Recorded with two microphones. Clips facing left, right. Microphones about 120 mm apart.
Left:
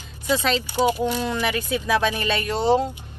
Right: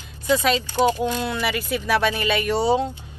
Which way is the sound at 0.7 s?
15° left (ahead or behind).